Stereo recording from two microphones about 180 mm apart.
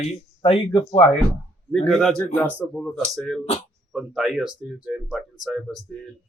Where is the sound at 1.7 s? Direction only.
Centre (ahead or behind).